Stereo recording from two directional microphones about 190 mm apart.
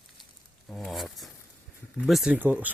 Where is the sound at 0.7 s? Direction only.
Centre (ahead or behind).